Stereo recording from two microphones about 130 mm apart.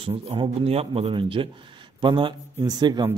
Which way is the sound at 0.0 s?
45° right (ahead or behind).